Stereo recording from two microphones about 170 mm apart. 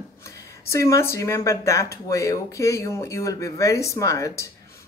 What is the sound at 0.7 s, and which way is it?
Speech, 15° left (ahead or behind).